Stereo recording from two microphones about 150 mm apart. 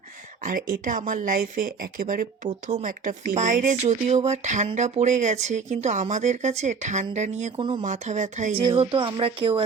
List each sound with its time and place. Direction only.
0.4 s a woman's voice: 65° right (ahead or behind)
8.5 s speech: 35° right (ahead or behind)